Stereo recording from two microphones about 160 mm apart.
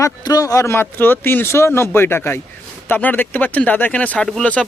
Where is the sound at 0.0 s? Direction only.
20° left (ahead or behind).